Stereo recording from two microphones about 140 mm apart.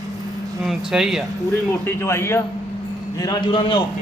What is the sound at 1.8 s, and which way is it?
Speech, 20° left (ahead or behind).